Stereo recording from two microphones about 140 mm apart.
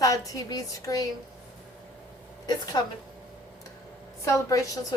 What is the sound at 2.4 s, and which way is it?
Speech, 25° left (ahead or behind).